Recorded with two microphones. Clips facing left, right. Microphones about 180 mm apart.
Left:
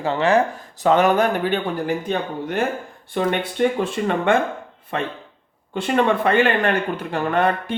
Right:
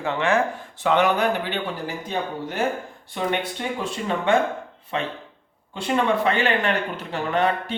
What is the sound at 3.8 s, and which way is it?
Speech, 55° left (ahead or behind).